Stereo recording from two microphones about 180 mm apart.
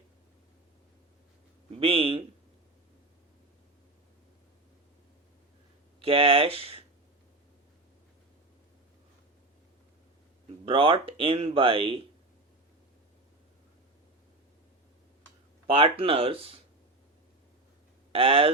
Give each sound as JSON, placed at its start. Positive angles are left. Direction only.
{"t": 1.7, "sound": "speech", "side_deg": -30}
{"t": 6.0, "sound": "speech", "side_deg": -30}
{"t": 10.7, "sound": "speech", "side_deg": -30}
{"t": 15.6, "sound": "speech", "side_deg": -30}
{"t": 18.1, "sound": "speech", "side_deg": -30}